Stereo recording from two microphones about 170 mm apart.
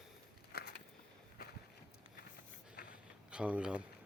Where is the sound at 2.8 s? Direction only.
65° left (ahead or behind).